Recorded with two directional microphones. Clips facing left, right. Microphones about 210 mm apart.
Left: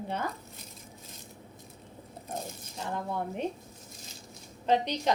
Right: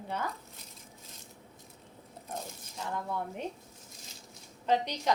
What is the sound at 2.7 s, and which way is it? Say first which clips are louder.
Speech: left 2 dB; 25° left (ahead or behind).